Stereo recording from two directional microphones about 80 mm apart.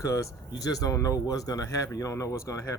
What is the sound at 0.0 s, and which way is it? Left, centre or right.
Speech, left.